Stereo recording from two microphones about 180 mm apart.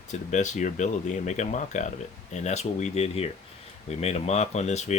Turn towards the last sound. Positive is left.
turn(degrees=40)  # may be behind; listen again after turning